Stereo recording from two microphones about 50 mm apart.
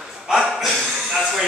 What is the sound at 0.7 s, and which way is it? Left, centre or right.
Speech, centre.